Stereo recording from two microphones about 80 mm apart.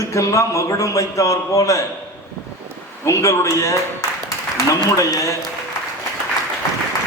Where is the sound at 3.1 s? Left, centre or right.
Left.